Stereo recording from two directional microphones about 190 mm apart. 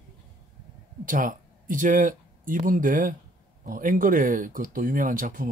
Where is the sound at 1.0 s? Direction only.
45° right (ahead or behind).